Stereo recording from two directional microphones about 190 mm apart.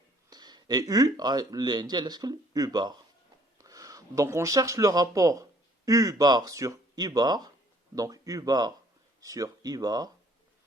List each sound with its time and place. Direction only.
0.3 s speech: 20° right (ahead or behind)